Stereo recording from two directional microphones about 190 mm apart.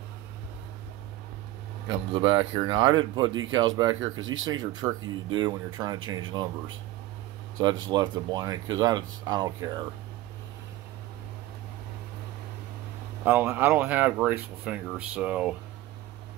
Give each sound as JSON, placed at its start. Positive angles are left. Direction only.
{"t": 2.1, "sound": "speech", "side_deg": -30}
{"t": 3.3, "sound": "speech", "side_deg": -90}
{"t": 3.5, "sound": "speech", "side_deg": -20}
{"t": 4.0, "sound": "speech", "side_deg": -90}
{"t": 4.5, "sound": "speech", "side_deg": -20}
{"t": 7.6, "sound": "speech", "side_deg": -20}
{"t": 13.2, "sound": "speech", "side_deg": -10}